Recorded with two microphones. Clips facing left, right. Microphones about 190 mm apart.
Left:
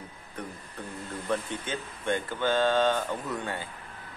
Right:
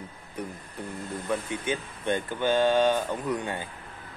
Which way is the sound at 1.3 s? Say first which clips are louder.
Right 2 dB; 10° right (ahead or behind).